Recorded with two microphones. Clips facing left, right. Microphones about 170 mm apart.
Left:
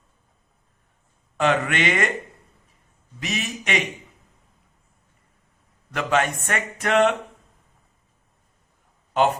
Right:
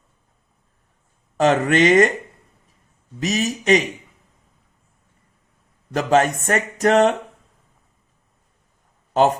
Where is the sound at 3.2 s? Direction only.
40° right (ahead or behind).